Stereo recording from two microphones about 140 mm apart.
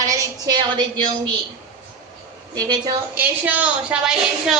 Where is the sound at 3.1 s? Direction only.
10° right (ahead or behind).